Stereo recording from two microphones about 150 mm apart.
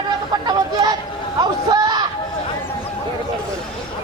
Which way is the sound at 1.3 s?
25° right (ahead or behind).